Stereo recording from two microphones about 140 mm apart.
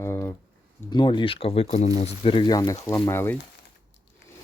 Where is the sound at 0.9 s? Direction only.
35° left (ahead or behind); by 3.4 s 15° left (ahead or behind).